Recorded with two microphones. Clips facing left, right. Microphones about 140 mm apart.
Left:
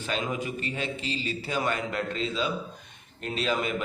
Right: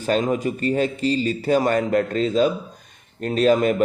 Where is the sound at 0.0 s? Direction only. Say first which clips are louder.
Right 10 dB; 40° right (ahead or behind).